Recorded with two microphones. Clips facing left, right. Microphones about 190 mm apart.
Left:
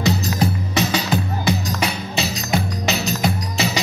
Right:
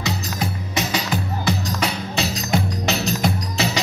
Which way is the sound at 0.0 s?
30° left (ahead or behind).